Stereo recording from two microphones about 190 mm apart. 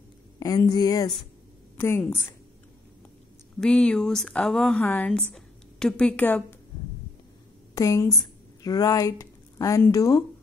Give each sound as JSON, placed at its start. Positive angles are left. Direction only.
{"t": 0.4, "sound": "speech", "side_deg": 20}
{"t": 3.6, "sound": "a woman's voice", "side_deg": 5}
{"t": 7.7, "sound": "speech", "side_deg": 15}